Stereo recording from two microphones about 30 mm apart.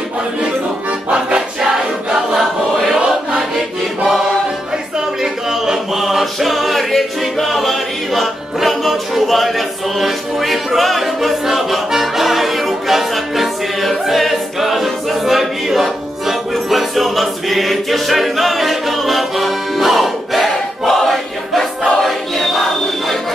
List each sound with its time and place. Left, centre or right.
1.6 s choir: right
5.2 s a sound: centre
5.9 s music: centre
16.5 s choir: centre